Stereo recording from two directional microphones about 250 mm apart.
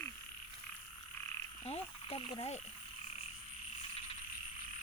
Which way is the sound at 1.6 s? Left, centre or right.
Left.